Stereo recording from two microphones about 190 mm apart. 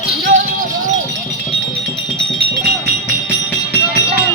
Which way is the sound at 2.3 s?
30° left (ahead or behind).